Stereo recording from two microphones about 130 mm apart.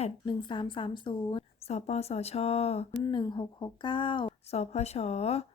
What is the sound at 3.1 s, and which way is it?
A woman's voice, 35° left (ahead or behind).